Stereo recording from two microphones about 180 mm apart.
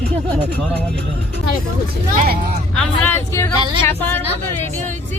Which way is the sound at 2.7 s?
10° left (ahead or behind).